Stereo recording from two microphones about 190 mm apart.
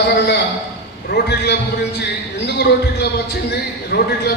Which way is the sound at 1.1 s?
60° left (ahead or behind).